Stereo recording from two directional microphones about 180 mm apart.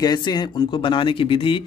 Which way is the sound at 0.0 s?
20° left (ahead or behind).